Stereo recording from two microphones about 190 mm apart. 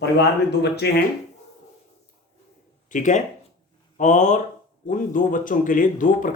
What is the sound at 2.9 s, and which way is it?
Speech, 40° left (ahead or behind).